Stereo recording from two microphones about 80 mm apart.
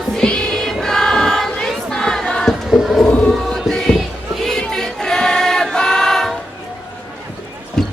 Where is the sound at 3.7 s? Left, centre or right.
Centre.